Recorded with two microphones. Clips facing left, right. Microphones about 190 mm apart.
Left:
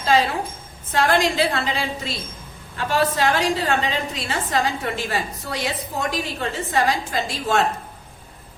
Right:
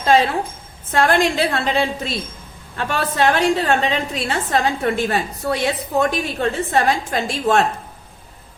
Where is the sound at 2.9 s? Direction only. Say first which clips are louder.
Right 1 dB; 55° right (ahead or behind).